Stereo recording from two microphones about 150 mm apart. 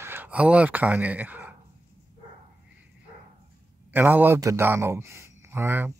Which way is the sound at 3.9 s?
15° right (ahead or behind).